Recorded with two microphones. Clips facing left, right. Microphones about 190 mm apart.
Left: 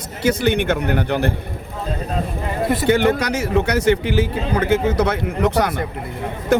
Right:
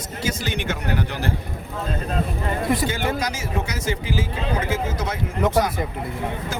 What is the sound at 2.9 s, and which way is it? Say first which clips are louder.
A man's voice: left 9 dB; 65° left (ahead or behind).